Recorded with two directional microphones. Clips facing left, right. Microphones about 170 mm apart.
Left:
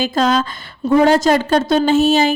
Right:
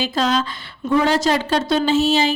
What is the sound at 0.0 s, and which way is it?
A woman's voice, 50° left (ahead or behind).